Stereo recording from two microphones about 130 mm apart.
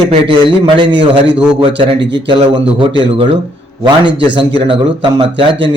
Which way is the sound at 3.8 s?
35° right (ahead or behind).